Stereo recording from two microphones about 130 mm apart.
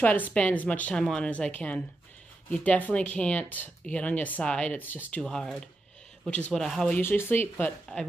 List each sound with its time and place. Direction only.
0.0 s a woman's voice: 15° left (ahead or behind)
2.5 s a woman's voice: 10° left (ahead or behind)
5.2 s speech: centre (ahead or behind)
7.0 s a woman's voice: 15° left (ahead or behind)